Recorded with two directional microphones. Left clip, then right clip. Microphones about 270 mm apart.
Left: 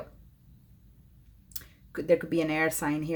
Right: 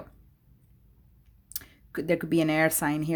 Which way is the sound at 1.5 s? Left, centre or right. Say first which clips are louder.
Right 2 dB; right.